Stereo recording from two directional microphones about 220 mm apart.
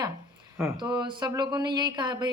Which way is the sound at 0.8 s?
20° right (ahead or behind).